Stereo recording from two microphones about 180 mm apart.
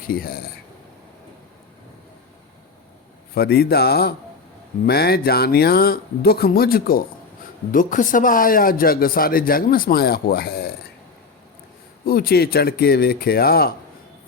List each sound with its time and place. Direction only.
0.1 s speech: 55° left (ahead or behind)
3.3 s speech: 60° left (ahead or behind)
12.0 s speech: 55° left (ahead or behind)